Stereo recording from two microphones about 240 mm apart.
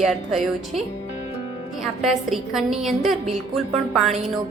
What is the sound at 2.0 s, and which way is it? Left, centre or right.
A woman's voice, centre.